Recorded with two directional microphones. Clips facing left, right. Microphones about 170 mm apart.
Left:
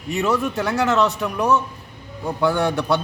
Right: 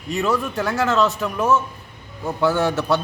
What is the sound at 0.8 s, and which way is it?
Speech, 20° left (ahead or behind).